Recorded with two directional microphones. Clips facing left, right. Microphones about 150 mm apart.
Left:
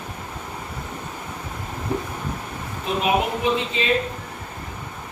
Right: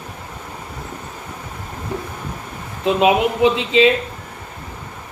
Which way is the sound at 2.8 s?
90° right.